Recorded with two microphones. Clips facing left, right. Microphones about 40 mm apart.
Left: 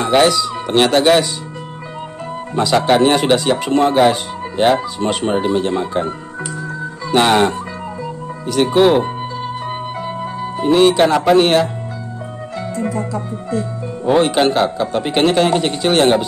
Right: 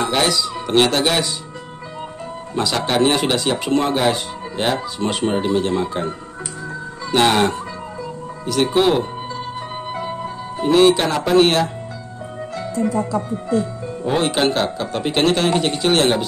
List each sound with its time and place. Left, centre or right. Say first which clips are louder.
0.0 s speech: left 5 dB; centre
2.5 s speech: left 6 dB; centre
7.1 s speech: left 3 dB; centre
9.6 s music: left 4 dB; centre
10.6 s speech: left 2 dB; centre
14.1 s speech: left 5 dB; centre